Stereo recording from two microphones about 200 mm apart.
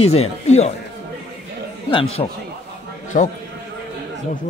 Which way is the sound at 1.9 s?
30° left (ahead or behind).